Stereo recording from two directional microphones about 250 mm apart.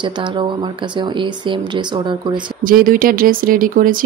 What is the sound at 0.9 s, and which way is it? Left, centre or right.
Speech, centre.